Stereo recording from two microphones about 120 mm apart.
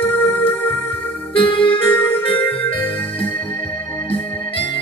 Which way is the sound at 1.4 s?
45° left (ahead or behind).